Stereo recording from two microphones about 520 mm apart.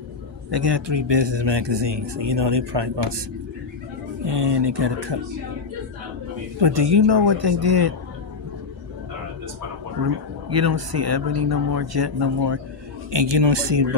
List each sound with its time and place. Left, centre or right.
0.5 s speech: right
4.3 s speech: right
6.6 s speech: right
10.6 s speech: right